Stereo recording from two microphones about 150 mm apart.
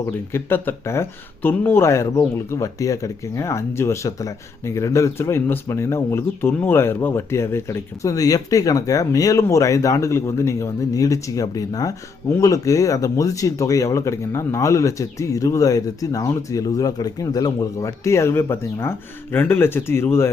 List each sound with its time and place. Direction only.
0.0 s speech: 15° left (ahead or behind)